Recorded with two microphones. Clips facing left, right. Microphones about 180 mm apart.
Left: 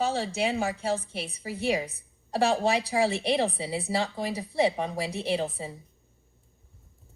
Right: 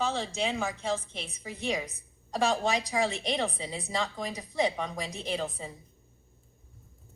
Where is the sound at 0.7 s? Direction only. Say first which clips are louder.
Left 3 dB; 35° left (ahead or behind).